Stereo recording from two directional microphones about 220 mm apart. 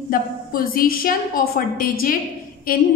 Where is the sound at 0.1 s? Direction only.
40° left (ahead or behind).